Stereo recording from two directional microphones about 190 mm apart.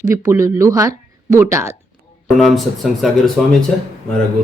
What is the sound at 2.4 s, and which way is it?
Speech, centre (ahead or behind).